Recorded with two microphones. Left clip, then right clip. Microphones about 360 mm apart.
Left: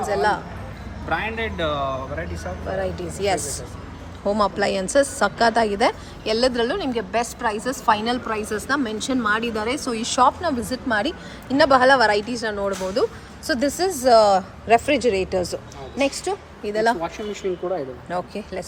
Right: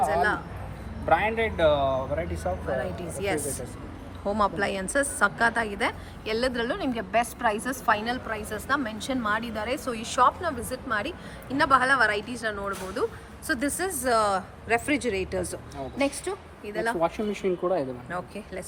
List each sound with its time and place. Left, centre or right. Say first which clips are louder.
0.1 s a woman's voice: left 4 dB; centre
1.0 s a man's voice: right 2 dB; right
3.2 s a woman's voice: left 6 dB; centre
18.1 s a woman's voice: left 7 dB; centre